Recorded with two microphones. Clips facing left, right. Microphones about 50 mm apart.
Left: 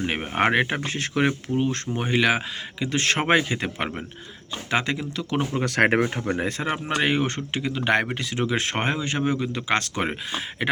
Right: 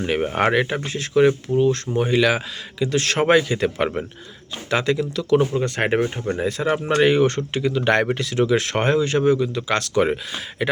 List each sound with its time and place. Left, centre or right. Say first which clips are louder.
0.0 s speech: right 3 dB; centre
0.5 s speech: right 2 dB; left
5.5 s speech: even; left
6.8 s speech: right 7 dB; centre
9.3 s speech: right 4 dB; left